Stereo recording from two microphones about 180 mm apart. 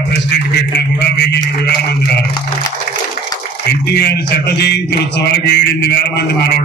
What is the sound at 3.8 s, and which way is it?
Speech, 65° left (ahead or behind).